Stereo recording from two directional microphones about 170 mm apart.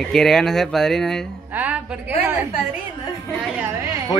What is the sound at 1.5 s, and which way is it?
Speech, 10° right (ahead or behind).